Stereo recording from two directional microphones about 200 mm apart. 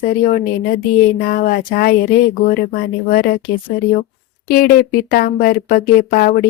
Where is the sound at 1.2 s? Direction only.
45° left (ahead or behind).